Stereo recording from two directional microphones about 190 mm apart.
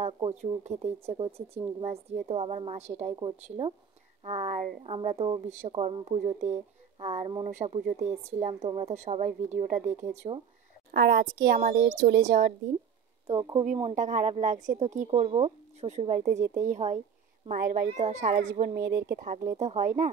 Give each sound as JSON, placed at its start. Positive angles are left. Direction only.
{"t": 0.0, "sound": "a woman's voice", "side_deg": -35}
{"t": 10.9, "sound": "a woman's voice", "side_deg": -60}
{"t": 13.3, "sound": "a woman's voice", "side_deg": -30}
{"t": 13.9, "sound": "speech", "side_deg": -40}
{"t": 18.8, "sound": "speech", "side_deg": -15}
{"t": 19.1, "sound": "speech", "side_deg": -45}